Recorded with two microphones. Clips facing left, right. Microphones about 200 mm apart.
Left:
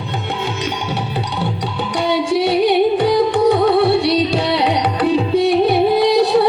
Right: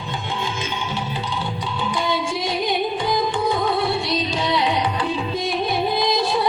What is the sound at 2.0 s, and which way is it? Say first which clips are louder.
Music: left 12 dB; 65° left (ahead or behind).